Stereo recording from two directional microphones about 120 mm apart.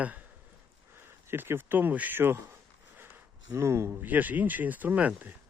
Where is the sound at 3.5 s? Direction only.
25° right (ahead or behind).